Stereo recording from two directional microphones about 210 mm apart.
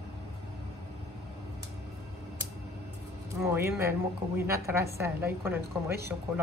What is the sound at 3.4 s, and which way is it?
Speech, 10° right (ahead or behind).